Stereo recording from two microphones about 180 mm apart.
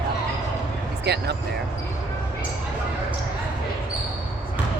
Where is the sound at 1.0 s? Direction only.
70° right (ahead or behind).